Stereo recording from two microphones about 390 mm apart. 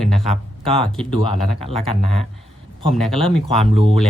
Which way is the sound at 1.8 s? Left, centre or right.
Left.